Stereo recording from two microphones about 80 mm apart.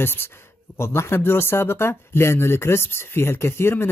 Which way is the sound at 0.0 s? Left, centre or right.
Left.